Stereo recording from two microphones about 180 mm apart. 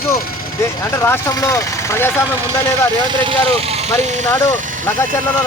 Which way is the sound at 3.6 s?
35° right (ahead or behind).